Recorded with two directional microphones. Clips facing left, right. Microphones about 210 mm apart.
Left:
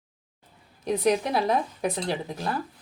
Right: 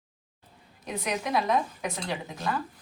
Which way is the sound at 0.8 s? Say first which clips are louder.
Left 8 dB; 35° left (ahead or behind).